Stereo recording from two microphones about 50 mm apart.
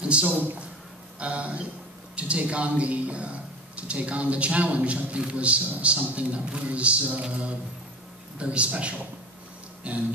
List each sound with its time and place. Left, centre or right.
0.0 s a man's voice: centre